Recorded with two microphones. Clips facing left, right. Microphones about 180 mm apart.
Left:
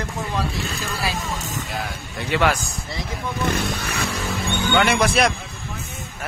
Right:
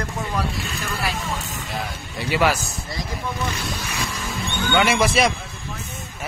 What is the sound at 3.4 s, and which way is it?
Speech, 55° left (ahead or behind).